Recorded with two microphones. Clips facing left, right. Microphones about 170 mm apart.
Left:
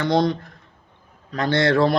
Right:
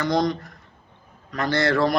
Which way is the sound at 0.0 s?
25° left (ahead or behind).